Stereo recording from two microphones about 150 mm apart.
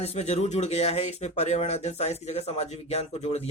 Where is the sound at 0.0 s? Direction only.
45° left (ahead or behind).